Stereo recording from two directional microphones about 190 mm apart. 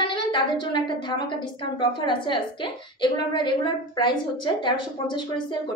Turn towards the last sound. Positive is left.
turn(degrees=25)  # may be behind; listen again after turning